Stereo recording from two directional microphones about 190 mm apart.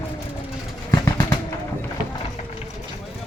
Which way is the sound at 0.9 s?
20° left (ahead or behind).